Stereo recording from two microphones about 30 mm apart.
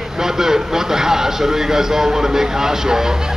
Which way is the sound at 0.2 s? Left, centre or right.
Centre.